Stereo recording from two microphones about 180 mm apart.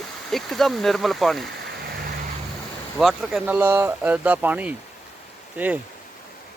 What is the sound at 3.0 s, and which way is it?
Speech, centre (ahead or behind).